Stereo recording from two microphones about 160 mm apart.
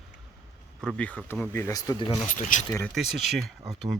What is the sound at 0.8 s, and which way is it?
Speech, 5° left (ahead or behind).